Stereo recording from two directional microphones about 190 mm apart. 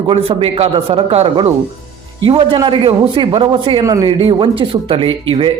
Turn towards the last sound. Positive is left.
turn(degrees=-30)  # may be behind; listen again after turning